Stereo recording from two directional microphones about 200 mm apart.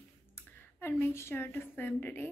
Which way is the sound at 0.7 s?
10° left (ahead or behind).